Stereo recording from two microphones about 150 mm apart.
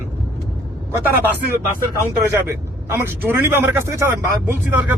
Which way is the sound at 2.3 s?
20° right (ahead or behind).